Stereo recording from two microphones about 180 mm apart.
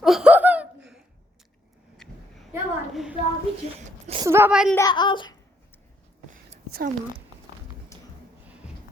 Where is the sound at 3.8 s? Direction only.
40° right (ahead or behind).